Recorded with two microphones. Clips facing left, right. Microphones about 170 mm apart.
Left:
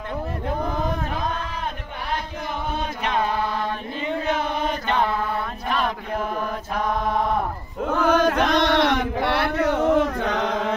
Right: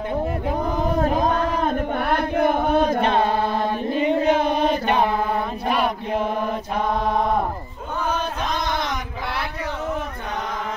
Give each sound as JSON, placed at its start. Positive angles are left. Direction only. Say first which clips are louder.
{"t": 1.0, "sound": "chant", "louder": "right 8 dB", "side_deg": -40}
{"t": 2.0, "sound": "chant", "louder": "right 8 dB", "side_deg": -60}
{"t": 3.0, "sound": "chant", "louder": "right 5 dB", "side_deg": -30}
{"t": 4.0, "sound": "chant", "louder": "right 6 dB", "side_deg": -15}
{"t": 7.9, "sound": "a sound", "louder": "left 6 dB", "side_deg": 80}